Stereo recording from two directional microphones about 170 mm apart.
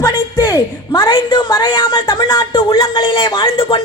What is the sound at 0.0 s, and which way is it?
A man's voice, 20° left (ahead or behind).